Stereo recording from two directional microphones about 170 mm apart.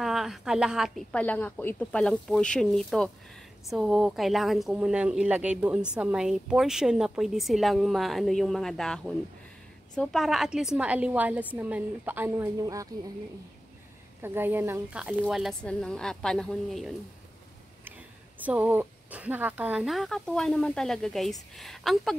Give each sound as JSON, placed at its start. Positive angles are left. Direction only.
{"t": 0.0, "sound": "a woman's voice", "side_deg": 0}
{"t": 14.2, "sound": "a woman's voice", "side_deg": -10}
{"t": 17.8, "sound": "speech", "side_deg": -10}